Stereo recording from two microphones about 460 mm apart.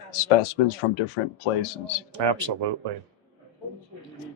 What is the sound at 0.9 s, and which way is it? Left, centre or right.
Speech, left.